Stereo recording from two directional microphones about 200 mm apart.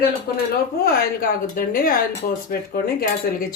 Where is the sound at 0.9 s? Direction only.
50° left (ahead or behind).